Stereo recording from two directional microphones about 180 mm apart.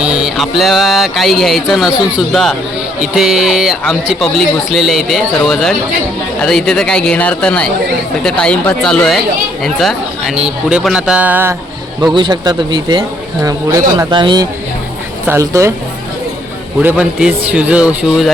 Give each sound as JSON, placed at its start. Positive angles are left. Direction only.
{"t": 0.0, "sound": "speech", "side_deg": -5}
{"t": 12.0, "sound": "a man's voice", "side_deg": -25}
{"t": 16.8, "sound": "a man's voice", "side_deg": -5}